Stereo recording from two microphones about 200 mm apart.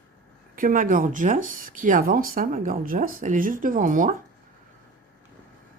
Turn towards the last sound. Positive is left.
turn(degrees=-40)  # may be behind; listen again after turning